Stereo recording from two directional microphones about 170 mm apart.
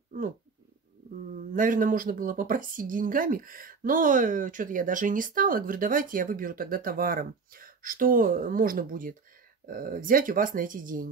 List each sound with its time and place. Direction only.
1.5 s speech: 50° right (ahead or behind)